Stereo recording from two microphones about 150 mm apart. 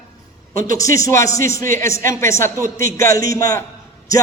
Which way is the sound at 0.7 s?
20° left (ahead or behind).